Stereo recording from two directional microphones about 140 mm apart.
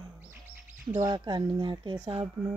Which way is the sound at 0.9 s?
30° right (ahead or behind).